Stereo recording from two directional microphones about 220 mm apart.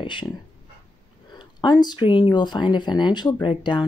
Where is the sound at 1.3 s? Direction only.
20° left (ahead or behind).